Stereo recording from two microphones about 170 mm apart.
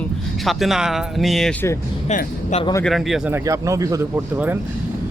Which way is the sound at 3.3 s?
20° right (ahead or behind).